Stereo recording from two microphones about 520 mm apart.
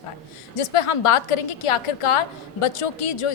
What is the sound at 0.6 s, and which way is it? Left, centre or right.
A woman's voice, left.